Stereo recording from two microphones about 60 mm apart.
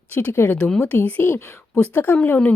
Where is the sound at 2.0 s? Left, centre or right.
Left.